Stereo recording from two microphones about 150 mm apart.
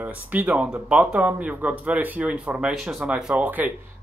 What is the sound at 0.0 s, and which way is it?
Speech, 10° right (ahead or behind).